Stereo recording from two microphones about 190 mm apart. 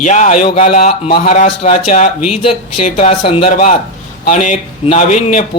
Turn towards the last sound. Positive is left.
turn(degrees=40)  # may be behind; listen again after turning